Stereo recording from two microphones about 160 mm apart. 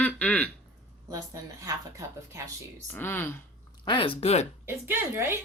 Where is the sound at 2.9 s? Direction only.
15° left (ahead or behind).